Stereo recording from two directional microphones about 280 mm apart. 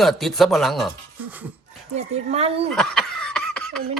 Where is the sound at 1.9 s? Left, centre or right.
Right.